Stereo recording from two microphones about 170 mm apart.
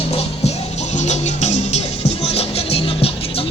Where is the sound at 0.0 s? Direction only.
35° left (ahead or behind).